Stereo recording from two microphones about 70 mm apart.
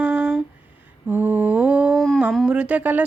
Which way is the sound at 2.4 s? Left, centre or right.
Centre.